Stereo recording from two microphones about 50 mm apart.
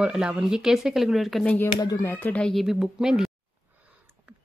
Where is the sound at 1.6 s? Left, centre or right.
Left.